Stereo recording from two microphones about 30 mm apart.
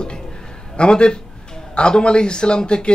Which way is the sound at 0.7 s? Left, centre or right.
Left.